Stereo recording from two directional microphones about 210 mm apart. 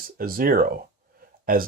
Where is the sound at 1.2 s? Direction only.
45° right (ahead or behind).